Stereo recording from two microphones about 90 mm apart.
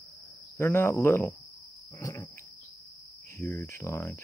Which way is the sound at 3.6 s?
30° left (ahead or behind).